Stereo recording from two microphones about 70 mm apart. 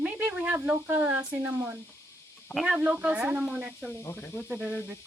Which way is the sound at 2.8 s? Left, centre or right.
Centre.